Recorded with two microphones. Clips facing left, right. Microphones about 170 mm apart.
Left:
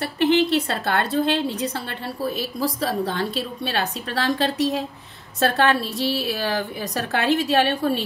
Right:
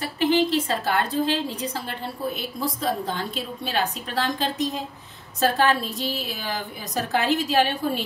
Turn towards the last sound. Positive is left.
turn(degrees=65)  # may be behind; listen again after turning